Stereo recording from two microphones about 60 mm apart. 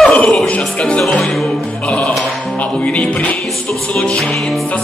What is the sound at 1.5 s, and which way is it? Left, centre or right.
Music, centre.